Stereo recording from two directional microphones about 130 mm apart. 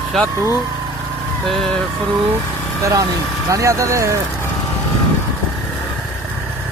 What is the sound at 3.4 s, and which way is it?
Speech, 25° right (ahead or behind).